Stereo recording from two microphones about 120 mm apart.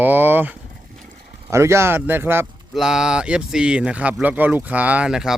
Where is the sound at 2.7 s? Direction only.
5° right (ahead or behind).